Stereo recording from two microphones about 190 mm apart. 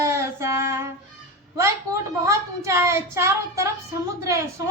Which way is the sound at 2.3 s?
15° right (ahead or behind).